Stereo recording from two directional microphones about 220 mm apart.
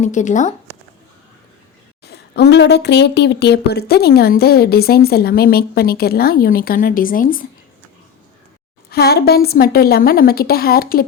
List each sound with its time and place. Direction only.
0.0 s speech: 35° left (ahead or behind)
2.0 s speech: 50° left (ahead or behind)
8.9 s speech: 45° left (ahead or behind)